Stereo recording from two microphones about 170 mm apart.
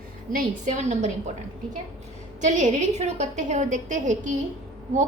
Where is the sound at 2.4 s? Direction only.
45° right (ahead or behind).